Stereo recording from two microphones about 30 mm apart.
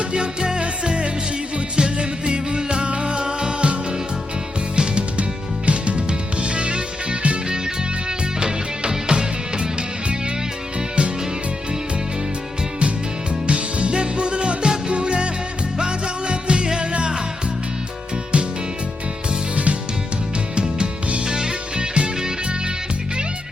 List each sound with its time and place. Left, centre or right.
0.1 s music: right
5.6 s music: right
8.4 s music: right
10.8 s music: right
13.5 s music: right
21.2 s music: right
21.8 s music: right